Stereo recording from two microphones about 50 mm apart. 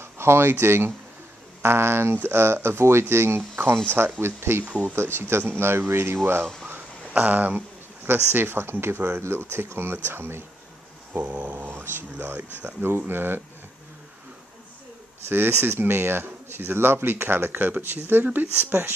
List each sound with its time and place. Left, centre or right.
0.0 s speech: right
4.6 s dog: right
4.9 s speech: right
6.4 s speech: centre
7.2 s speech: right
8.3 s speech: right
11.2 s dog: right
11.6 s a sound: right
12.6 s speech: right
15.2 s speech: right